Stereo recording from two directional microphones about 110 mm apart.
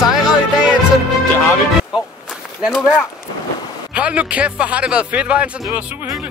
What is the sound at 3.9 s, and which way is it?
Speech, 10° right (ahead or behind).